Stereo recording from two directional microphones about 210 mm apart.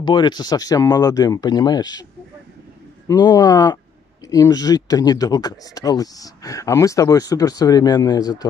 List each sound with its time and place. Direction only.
0.0 s speech: 20° left (ahead or behind)
3.1 s speech: 15° left (ahead or behind)